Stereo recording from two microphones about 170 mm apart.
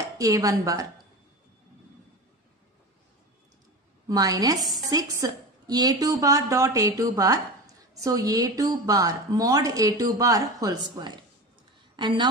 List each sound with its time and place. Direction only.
0.2 s a woman's voice: 20° right (ahead or behind)
4.1 s a woman's voice: 20° right (ahead or behind)
4.6 s speech: centre (ahead or behind)
4.8 s a woman's voice: 20° right (ahead or behind)